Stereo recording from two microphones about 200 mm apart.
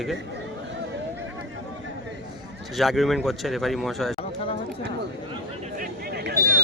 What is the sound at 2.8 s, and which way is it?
Speech, centre (ahead or behind).